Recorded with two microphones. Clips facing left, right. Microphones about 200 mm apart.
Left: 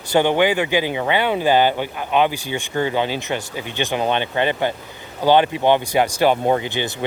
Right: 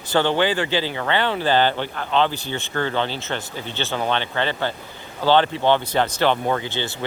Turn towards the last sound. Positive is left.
turn(degrees=15)  # may be behind; listen again after turning